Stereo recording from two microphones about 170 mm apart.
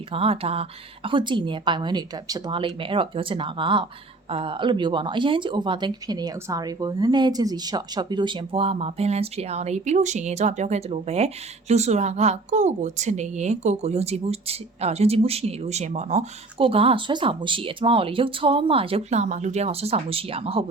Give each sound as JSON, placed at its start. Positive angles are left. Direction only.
{"t": 0.1, "sound": "speech", "side_deg": -35}